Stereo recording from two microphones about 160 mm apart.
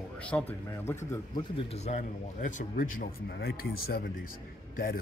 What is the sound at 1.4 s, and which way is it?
A man's voice, 35° left (ahead or behind).